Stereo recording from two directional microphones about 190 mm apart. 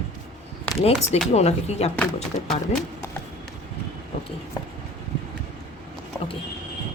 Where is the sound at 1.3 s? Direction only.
35° left (ahead or behind).